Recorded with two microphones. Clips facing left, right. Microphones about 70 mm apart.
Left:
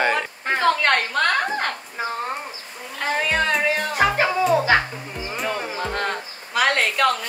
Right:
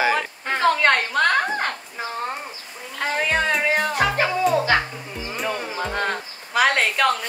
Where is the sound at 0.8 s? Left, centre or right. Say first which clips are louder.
Right 1 dB; centre.